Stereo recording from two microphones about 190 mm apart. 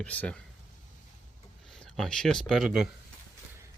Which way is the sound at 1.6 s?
5° left (ahead or behind).